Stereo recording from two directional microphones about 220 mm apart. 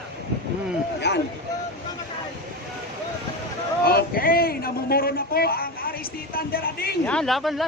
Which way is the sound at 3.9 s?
40° left (ahead or behind).